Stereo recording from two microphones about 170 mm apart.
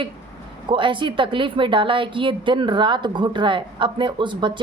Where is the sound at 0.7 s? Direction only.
30° right (ahead or behind).